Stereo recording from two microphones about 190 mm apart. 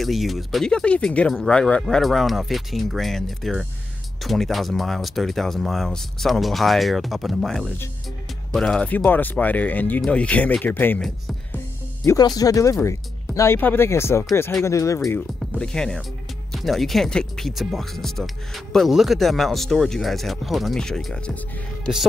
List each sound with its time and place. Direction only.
0.0 s speech: centre (ahead or behind)
12.0 s speech: 20° left (ahead or behind); by 21.2 s 5° left (ahead or behind)